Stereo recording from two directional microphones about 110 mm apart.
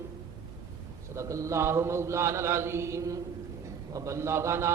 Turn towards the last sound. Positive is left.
turn(degrees=-25)  # may be behind; listen again after turning